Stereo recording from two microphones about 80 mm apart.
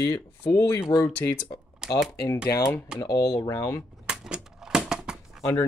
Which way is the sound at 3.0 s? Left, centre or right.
Left.